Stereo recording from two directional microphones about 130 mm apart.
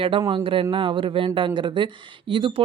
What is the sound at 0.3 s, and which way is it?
Speech, 45° right (ahead or behind).